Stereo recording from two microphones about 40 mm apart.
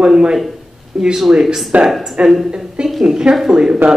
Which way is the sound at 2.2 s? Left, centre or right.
Right.